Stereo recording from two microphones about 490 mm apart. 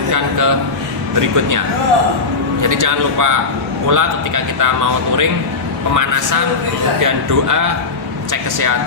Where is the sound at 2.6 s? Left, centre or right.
Right.